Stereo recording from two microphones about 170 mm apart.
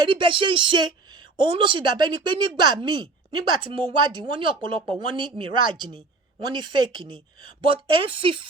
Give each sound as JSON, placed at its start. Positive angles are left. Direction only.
{"t": 0.0, "sound": "speech", "side_deg": -30}